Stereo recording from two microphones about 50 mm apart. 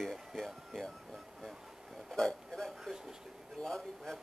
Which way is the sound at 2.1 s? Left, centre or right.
Centre.